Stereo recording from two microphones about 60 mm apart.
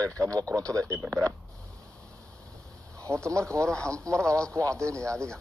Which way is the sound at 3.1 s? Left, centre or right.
Right.